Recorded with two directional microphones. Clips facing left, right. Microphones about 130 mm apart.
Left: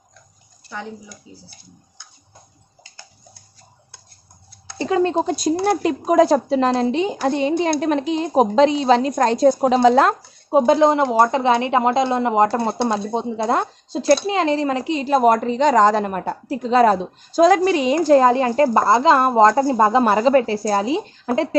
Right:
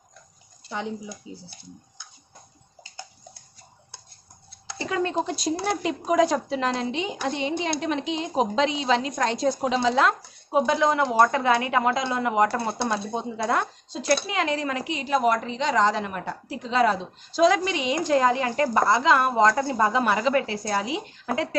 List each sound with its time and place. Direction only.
0.7 s speech: 20° right (ahead or behind)
4.7 s speech: 30° left (ahead or behind)
5.2 s a woman's voice: 45° left (ahead or behind); by 21.5 s 30° left (ahead or behind)